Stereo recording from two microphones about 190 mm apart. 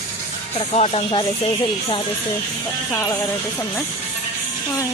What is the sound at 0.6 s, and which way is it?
Speech, 35° left (ahead or behind).